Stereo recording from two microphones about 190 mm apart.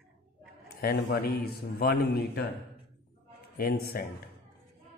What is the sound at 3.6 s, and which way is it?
Mantra, 55° left (ahead or behind).